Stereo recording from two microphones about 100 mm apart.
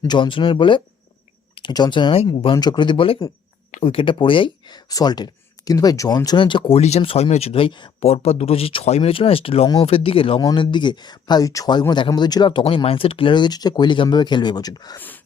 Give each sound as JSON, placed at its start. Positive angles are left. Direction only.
{"t": 0.1, "sound": "speech", "side_deg": 55}
{"t": 4.9, "sound": "speech", "side_deg": 40}
{"t": 6.7, "sound": "speech", "side_deg": 90}
{"t": 8.0, "sound": "speech", "side_deg": 90}
{"t": 10.5, "sound": "speech", "side_deg": 50}
{"t": 14.9, "sound": "speech", "side_deg": 20}